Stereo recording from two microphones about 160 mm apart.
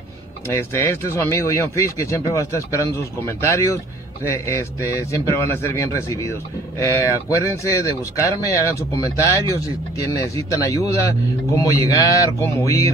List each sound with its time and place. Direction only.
0.5 s speech: 15° left (ahead or behind)